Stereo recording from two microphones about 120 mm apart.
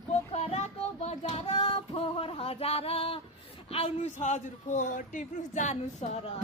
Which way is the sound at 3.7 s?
55° left (ahead or behind).